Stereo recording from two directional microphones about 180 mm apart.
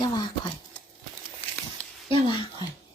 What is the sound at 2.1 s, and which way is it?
Speech, 25° left (ahead or behind).